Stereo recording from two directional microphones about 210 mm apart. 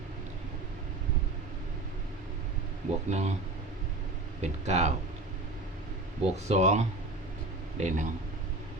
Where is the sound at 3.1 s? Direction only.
35° right (ahead or behind).